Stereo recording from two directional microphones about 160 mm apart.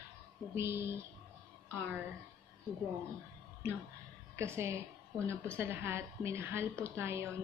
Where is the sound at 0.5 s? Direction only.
15° right (ahead or behind).